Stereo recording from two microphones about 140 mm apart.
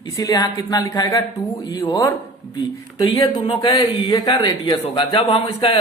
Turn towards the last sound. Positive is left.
turn(degrees=40)  # may be behind; listen again after turning